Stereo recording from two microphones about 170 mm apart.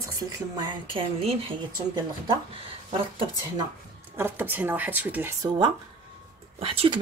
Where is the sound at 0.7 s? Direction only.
30° right (ahead or behind).